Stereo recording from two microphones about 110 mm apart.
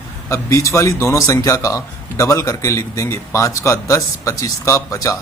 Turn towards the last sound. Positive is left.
turn(degrees=30)  # may be behind; listen again after turning